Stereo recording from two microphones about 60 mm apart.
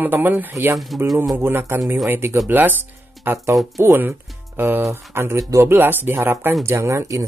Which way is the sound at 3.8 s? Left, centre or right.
Right.